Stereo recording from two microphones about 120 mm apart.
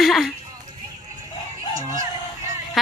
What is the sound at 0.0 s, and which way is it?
Speech, centre (ahead or behind).